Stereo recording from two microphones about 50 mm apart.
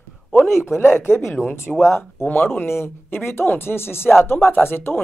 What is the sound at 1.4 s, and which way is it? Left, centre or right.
Speech, left.